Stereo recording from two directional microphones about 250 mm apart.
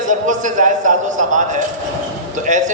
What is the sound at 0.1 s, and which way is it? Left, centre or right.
A man's voice, right.